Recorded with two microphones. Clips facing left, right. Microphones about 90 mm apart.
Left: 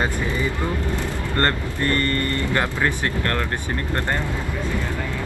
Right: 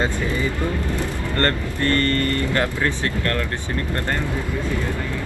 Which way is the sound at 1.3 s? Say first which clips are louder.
Even; 20° left (ahead or behind).